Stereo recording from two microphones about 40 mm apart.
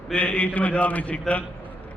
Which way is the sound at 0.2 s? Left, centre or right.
Left.